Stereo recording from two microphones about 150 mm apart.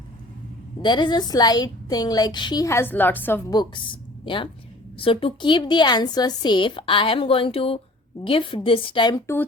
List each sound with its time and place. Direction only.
0.8 s a woman's voice: 30° left (ahead or behind); by 3.4 s 15° left (ahead or behind)
4.9 s a woman's voice: 35° left (ahead or behind)